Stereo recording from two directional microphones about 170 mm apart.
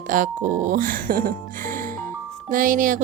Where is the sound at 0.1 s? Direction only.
50° right (ahead or behind).